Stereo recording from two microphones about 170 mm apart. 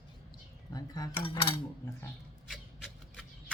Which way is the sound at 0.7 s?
20° left (ahead or behind).